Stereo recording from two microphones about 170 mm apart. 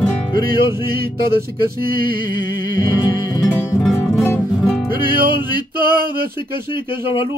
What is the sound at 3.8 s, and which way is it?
Music, 10° left (ahead or behind).